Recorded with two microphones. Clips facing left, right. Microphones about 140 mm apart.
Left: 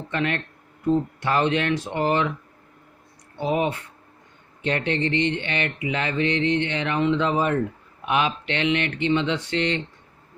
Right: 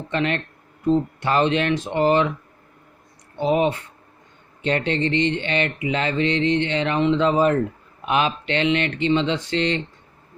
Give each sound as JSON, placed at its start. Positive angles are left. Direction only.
{"t": 0.1, "sound": "speech", "side_deg": -25}
{"t": 3.4, "sound": "speech", "side_deg": -25}